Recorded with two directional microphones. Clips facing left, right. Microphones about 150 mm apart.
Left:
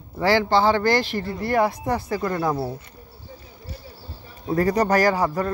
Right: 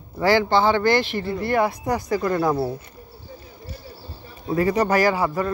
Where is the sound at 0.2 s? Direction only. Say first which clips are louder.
Right 1 dB; 30° left (ahead or behind).